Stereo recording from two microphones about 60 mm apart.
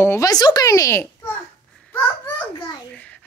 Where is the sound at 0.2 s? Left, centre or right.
Left.